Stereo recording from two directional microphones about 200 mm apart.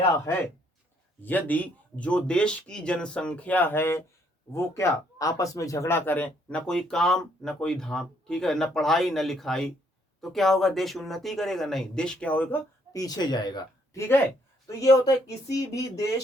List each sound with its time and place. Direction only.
1.2 s speech: 10° left (ahead or behind)